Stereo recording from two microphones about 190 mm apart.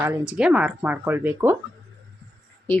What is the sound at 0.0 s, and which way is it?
Speech, 10° right (ahead or behind).